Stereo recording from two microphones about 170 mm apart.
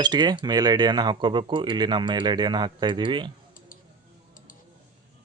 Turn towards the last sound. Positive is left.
turn(degrees=-30)  # may be behind; listen again after turning